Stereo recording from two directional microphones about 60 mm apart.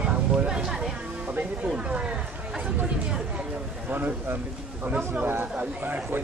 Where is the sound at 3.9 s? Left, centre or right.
Right.